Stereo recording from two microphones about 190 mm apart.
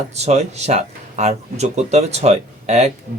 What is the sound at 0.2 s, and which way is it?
Speech, 35° right (ahead or behind).